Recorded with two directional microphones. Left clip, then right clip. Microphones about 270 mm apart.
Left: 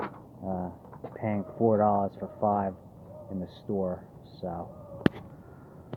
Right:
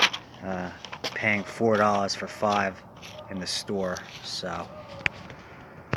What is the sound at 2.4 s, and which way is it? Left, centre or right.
Speech, right.